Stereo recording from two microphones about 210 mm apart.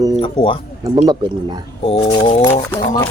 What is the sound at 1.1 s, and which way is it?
Speech, 20° right (ahead or behind).